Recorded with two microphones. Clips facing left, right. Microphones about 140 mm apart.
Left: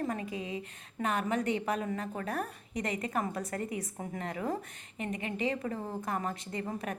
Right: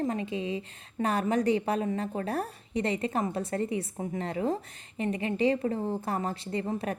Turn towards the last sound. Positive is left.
turn(degrees=-30)  # may be behind; listen again after turning